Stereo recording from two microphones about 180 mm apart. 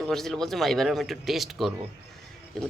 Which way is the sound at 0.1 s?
Centre (ahead or behind).